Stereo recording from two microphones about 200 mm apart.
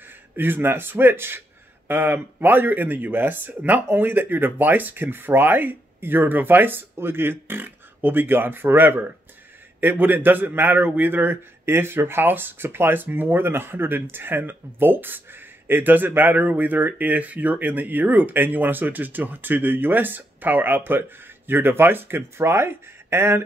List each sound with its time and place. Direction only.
0.4 s a man's voice: 10° right (ahead or behind)